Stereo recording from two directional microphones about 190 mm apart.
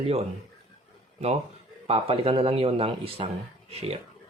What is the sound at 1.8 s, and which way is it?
Speech, 30° right (ahead or behind).